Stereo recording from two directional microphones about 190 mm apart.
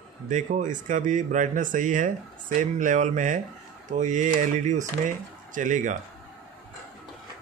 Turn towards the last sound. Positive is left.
turn(degrees=-40)  # may be behind; listen again after turning